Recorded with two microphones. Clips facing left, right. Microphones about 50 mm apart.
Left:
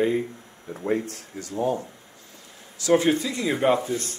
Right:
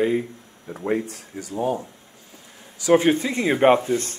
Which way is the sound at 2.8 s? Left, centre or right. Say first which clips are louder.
Right 3 dB; right.